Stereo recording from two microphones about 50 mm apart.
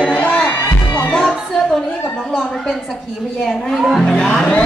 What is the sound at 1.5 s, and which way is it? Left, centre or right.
A man's voice, centre.